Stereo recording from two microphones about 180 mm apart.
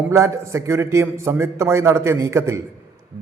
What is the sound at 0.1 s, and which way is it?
A man's voice, 15° right (ahead or behind).